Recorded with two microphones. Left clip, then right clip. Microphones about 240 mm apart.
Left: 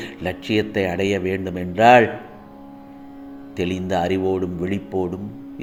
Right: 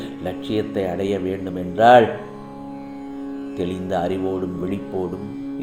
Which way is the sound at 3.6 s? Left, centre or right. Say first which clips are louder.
Left 2 dB; left.